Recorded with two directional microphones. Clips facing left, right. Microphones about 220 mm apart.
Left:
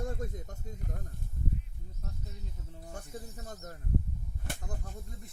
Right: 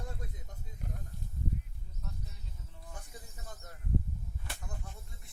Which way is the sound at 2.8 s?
45° left (ahead or behind).